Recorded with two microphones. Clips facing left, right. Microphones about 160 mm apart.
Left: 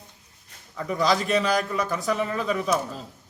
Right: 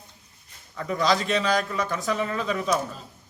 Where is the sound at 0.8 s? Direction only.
5° left (ahead or behind).